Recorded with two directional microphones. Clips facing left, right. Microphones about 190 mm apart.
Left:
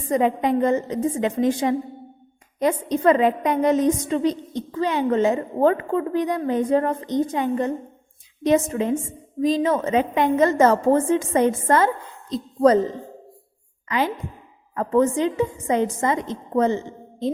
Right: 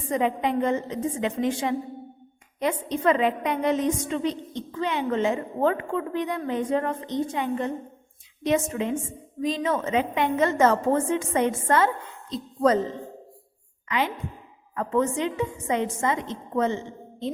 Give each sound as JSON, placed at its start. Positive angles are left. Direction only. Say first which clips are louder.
{"t": 0.1, "sound": "a woman's voice", "louder": "left 5 dB", "side_deg": 40}
{"t": 13.8, "sound": "a woman's voice", "louder": "left 3 dB", "side_deg": 40}